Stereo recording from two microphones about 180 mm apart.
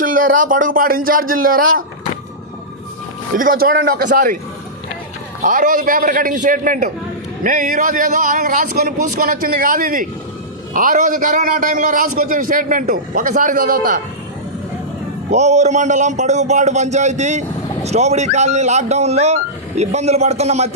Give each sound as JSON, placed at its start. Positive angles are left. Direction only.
{"t": 0.0, "sound": "a man's voice", "side_deg": -50}
{"t": 3.3, "sound": "a man's voice", "side_deg": -50}
{"t": 5.4, "sound": "a man's voice", "side_deg": -45}
{"t": 15.3, "sound": "speech", "side_deg": -40}